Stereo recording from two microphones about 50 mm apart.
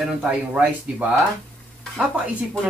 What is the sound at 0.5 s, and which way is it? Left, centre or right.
Speech, right.